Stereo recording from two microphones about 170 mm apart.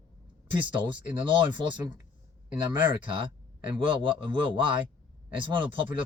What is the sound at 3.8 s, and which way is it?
Speech, 30° right (ahead or behind).